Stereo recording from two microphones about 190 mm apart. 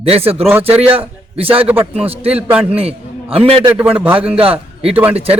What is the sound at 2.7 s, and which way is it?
Speech, 30° right (ahead or behind).